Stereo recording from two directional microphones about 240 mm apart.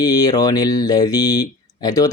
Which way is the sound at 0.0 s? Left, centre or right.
Centre.